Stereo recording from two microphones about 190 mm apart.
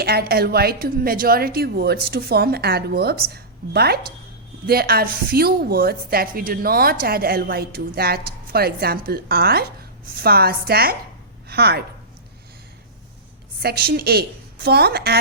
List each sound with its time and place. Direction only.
0.0 s a woman's voice: 55° right (ahead or behind)
13.6 s a woman's voice: 55° right (ahead or behind)